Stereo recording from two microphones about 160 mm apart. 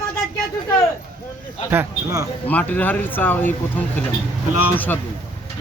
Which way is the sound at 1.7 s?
15° right (ahead or behind).